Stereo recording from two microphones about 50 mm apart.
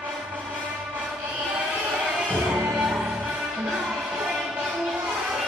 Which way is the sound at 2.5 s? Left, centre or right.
Right.